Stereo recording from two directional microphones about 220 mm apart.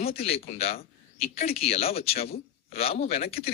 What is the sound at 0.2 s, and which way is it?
Speech, 25° left (ahead or behind).